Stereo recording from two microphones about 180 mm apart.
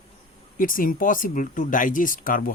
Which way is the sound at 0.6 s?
50° left (ahead or behind).